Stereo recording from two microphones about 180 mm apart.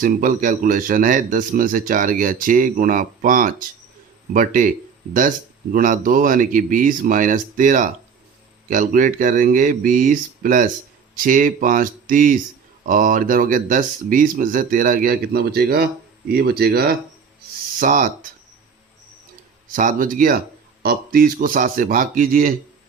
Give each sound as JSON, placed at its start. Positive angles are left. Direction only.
{"t": 0.0, "sound": "speech", "side_deg": -50}
{"t": 5.7, "sound": "speech", "side_deg": -50}
{"t": 17.7, "sound": "speech", "side_deg": -50}
{"t": 19.7, "sound": "speech", "side_deg": -50}